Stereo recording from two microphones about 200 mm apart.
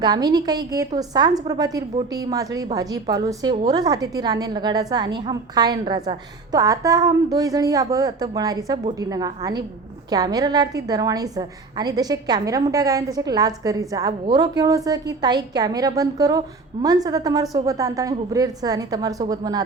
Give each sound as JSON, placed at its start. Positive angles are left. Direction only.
{"t": 0.0, "sound": "a woman's voice", "side_deg": -20}